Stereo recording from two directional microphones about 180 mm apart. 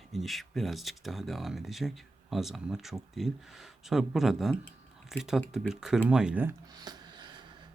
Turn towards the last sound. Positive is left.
turn(degrees=-25)  # may be behind; listen again after turning